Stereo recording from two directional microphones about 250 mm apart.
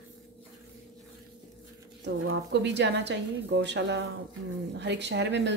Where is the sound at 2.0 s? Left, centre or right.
Right.